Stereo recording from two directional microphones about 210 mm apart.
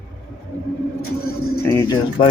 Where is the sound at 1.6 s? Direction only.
20° left (ahead or behind).